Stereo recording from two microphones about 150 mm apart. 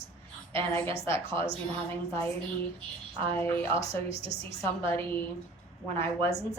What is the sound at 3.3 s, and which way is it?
A woman's voice, 15° left (ahead or behind).